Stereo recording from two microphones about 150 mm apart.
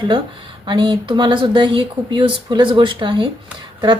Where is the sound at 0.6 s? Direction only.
30° right (ahead or behind).